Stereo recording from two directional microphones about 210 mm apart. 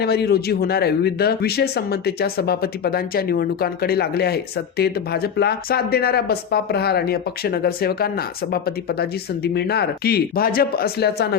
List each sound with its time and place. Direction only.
0.0 s speech: 50° left (ahead or behind)